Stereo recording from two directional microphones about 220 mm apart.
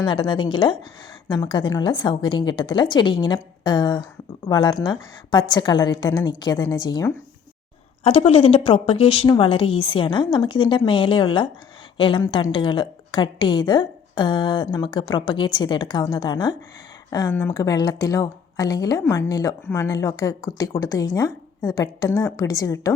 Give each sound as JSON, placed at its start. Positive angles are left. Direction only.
{"t": 0.0, "sound": "a woman's voice", "side_deg": 20}